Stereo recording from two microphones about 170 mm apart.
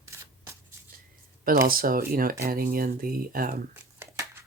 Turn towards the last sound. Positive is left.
turn(degrees=-15)  # may be behind; listen again after turning